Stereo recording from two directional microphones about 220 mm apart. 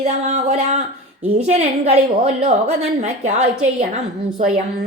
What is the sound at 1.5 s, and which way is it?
A woman's voice, 30° right (ahead or behind).